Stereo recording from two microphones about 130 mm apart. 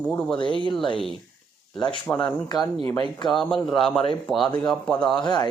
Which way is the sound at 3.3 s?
5° left (ahead or behind).